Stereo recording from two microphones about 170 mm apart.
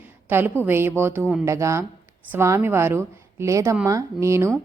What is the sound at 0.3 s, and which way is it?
A woman's voice, 10° right (ahead or behind).